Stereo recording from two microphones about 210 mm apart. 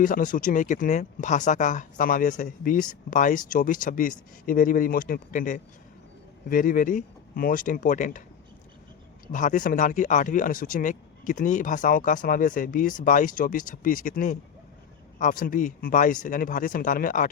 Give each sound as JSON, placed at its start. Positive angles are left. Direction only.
{"t": 0.0, "sound": "speech", "side_deg": 40}
{"t": 9.2, "sound": "speech", "side_deg": 40}